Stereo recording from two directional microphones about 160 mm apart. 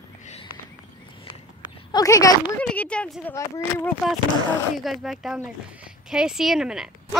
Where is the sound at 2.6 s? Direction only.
5° left (ahead or behind).